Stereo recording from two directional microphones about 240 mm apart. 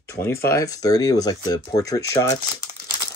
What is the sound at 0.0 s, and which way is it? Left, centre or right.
Speech, centre.